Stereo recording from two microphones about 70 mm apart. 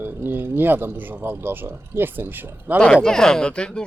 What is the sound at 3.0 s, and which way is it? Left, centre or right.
Speech, centre.